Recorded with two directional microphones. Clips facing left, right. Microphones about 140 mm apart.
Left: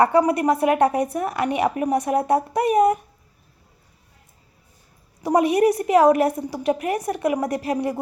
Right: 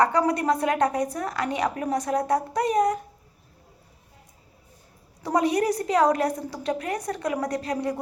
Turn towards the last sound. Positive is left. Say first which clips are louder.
# left 4 dB
turn(degrees=20)  # may be behind; listen again after turning